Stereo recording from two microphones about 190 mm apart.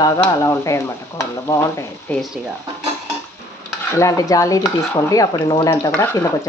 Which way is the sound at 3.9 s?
15° left (ahead or behind).